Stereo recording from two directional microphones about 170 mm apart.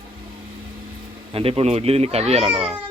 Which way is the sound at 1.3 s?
35° right (ahead or behind).